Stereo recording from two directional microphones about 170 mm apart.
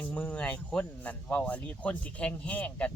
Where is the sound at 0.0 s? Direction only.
5° left (ahead or behind).